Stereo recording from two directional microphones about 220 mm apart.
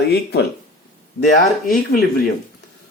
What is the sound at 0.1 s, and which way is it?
Speech, 50° left (ahead or behind).